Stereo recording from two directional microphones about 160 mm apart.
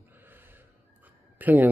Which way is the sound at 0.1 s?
10° right (ahead or behind).